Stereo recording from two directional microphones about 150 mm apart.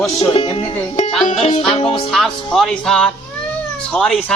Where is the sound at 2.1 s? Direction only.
Centre (ahead or behind).